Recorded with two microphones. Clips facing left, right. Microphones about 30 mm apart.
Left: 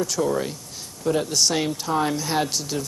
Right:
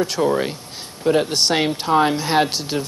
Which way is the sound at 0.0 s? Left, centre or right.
Right.